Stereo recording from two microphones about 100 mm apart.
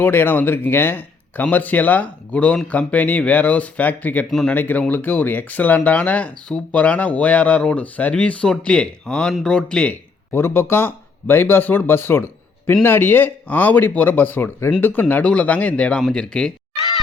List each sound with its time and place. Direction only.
0.0 s speech: 20° left (ahead or behind)
10.3 s speech: 20° left (ahead or behind)